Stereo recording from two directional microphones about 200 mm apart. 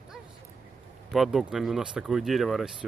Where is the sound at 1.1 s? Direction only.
Centre (ahead or behind).